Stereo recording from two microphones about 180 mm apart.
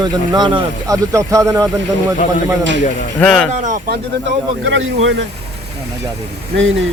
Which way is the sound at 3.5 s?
45° right (ahead or behind).